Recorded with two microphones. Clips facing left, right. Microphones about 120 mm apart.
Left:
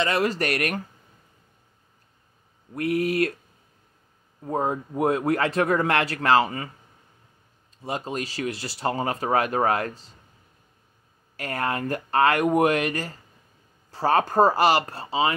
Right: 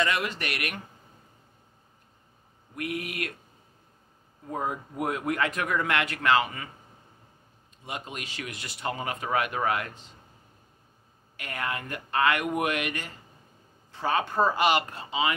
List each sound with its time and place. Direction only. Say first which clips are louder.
0.0 s speech: left 5 dB; 35° left (ahead or behind)
2.7 s speech: left 10 dB; 35° left (ahead or behind)
4.5 s speech: left 6 dB; 30° left (ahead or behind)
7.8 s speech: left 8 dB; 35° left (ahead or behind)
11.3 s speech: left 6 dB; 40° left (ahead or behind)